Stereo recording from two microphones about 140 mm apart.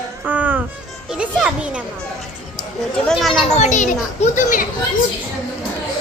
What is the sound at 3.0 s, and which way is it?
Speech, centre (ahead or behind).